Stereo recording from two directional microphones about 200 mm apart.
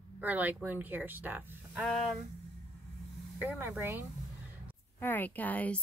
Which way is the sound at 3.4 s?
10° right (ahead or behind).